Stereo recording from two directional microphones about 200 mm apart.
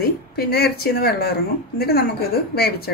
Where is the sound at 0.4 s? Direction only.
50° left (ahead or behind).